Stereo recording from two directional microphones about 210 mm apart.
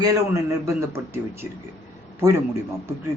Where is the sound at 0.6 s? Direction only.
10° right (ahead or behind).